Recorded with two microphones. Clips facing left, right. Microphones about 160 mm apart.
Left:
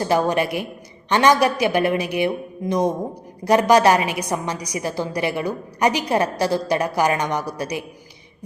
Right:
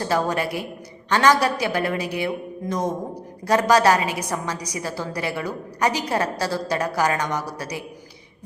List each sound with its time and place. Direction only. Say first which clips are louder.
0.0 s a woman's voice: left 3 dB; 20° left (ahead or behind)